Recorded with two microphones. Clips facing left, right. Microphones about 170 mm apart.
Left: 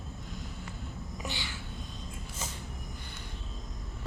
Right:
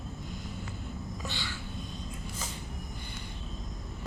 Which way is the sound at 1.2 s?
15° left (ahead or behind).